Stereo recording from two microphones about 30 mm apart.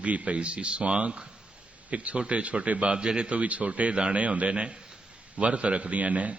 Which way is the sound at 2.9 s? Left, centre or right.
Right.